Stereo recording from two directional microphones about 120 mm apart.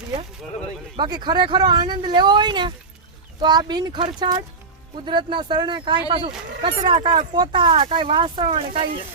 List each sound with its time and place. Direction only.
0.9 s speech: 40° right (ahead or behind)